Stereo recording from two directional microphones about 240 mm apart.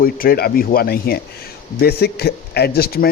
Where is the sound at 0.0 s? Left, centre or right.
Left.